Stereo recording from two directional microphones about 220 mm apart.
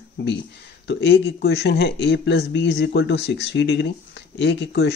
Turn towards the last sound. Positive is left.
turn(degrees=50)  # may be behind; listen again after turning